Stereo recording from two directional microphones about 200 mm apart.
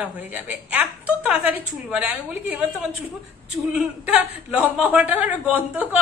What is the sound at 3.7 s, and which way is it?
A man's voice, 5° right (ahead or behind).